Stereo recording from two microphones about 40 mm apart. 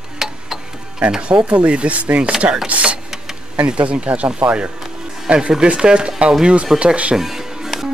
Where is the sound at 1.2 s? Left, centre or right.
Right.